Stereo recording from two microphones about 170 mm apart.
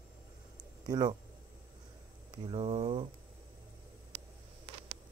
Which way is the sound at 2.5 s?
35° right (ahead or behind).